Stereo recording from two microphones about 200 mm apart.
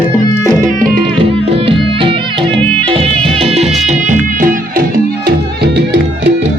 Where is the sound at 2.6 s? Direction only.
5° left (ahead or behind).